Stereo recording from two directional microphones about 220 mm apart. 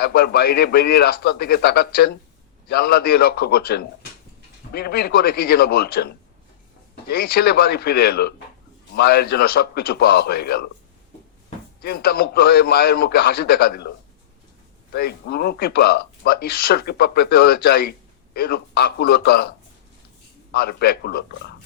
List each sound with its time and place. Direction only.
0.0 s speech: 45° left (ahead or behind)
11.8 s speech: 45° left (ahead or behind)
14.9 s speech: 45° left (ahead or behind)
20.5 s speech: 45° left (ahead or behind)